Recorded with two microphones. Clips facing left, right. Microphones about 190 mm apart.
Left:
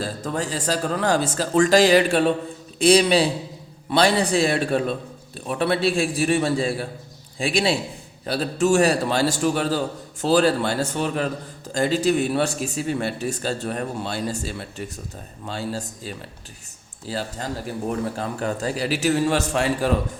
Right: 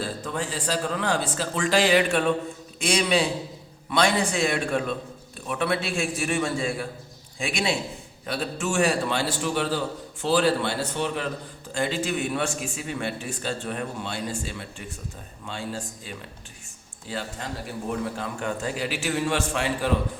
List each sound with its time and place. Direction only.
0.0 s a man's voice: 40° left (ahead or behind)